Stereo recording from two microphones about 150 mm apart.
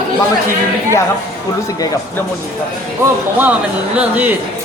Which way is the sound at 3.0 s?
10° right (ahead or behind).